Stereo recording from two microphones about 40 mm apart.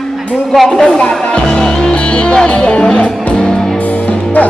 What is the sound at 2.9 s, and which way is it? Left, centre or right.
Music, left.